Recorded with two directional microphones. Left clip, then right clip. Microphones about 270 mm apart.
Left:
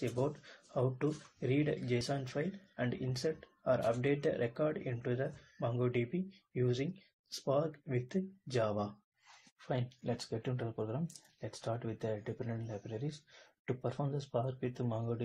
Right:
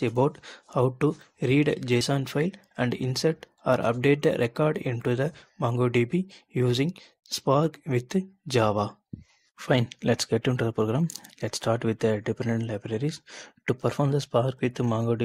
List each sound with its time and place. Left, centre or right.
0.0 s speech: right